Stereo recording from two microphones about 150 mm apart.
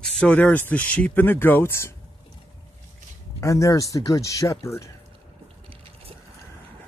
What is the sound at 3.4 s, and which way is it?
Speech, 20° left (ahead or behind).